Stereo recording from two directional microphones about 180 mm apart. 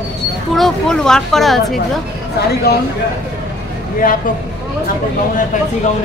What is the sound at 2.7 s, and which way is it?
Speech, 60° left (ahead or behind).